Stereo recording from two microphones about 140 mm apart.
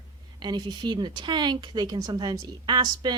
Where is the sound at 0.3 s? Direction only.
30° right (ahead or behind).